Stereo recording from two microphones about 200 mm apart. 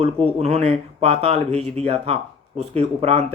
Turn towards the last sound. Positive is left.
turn(degrees=-30)  # may be behind; listen again after turning